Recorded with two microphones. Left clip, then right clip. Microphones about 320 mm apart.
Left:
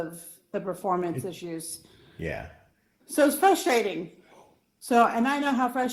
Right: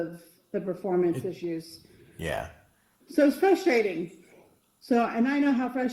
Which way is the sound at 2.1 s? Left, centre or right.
Centre.